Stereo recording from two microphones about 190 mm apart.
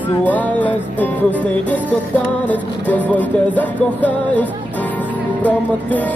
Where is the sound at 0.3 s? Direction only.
10° left (ahead or behind).